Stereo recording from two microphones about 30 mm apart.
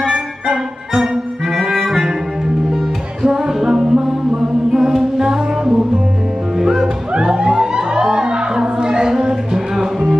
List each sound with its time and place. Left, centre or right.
1.5 s music: centre
3.3 s music: centre
7.2 s music: right
9.3 s music: centre